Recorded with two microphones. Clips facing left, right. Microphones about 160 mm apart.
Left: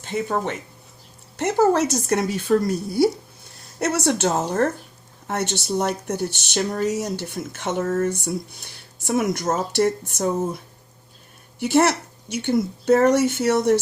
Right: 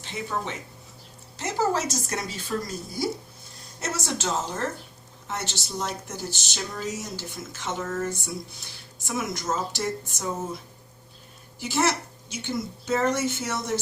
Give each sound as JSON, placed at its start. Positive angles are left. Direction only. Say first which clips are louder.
{"t": 0.0, "sound": "speech", "louder": "left 7 dB", "side_deg": 50}
{"t": 11.6, "sound": "speech", "louder": "left 7 dB", "side_deg": 60}